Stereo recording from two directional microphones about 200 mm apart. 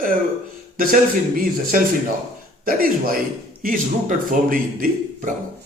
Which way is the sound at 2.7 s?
45° right (ahead or behind).